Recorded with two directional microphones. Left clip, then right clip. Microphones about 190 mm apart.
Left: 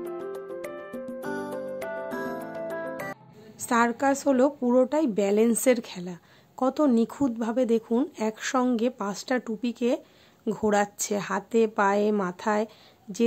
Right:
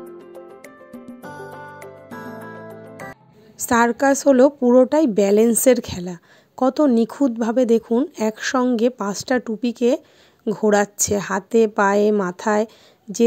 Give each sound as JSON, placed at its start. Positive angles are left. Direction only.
{"t": 1.2, "sound": "music", "side_deg": 0}
{"t": 3.5, "sound": "a woman's voice", "side_deg": -30}